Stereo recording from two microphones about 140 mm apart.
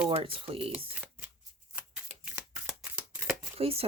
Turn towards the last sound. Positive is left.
turn(degrees=-45)  # may be behind; listen again after turning